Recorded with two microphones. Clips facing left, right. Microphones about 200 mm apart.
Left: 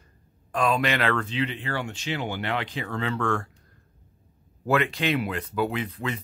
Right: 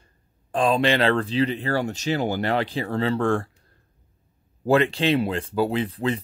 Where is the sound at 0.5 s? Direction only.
30° right (ahead or behind).